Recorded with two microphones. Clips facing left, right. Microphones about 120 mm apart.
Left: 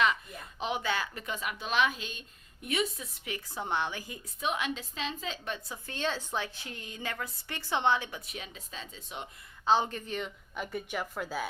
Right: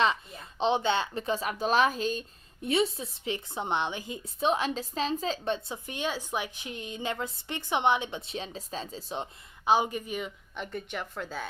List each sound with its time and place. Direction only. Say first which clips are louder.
0.0 s speech: right 2 dB; 30° right (ahead or behind)
9.6 s speech: right 2 dB; 10° right (ahead or behind)
10.5 s a woman's voice: left 2 dB; 5° left (ahead or behind)